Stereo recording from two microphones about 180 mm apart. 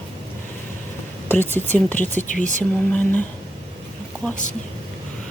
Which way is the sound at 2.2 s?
45° left (ahead or behind).